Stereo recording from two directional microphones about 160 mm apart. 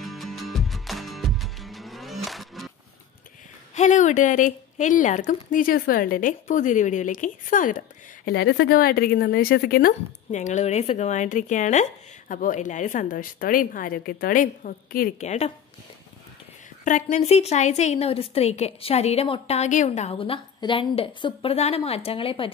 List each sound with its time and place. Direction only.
0.0 s music: centre (ahead or behind)
3.7 s speech: 50° left (ahead or behind)
8.3 s speech: 90° left; by 15.5 s 45° left (ahead or behind)
16.8 s a woman's voice: 50° left (ahead or behind); by 22.5 s 35° left (ahead or behind)